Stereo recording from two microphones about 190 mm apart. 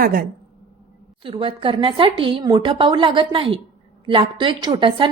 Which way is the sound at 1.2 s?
30° right (ahead or behind).